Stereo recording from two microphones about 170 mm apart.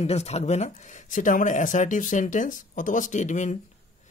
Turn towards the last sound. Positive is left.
turn(degrees=45)  # may be behind; listen again after turning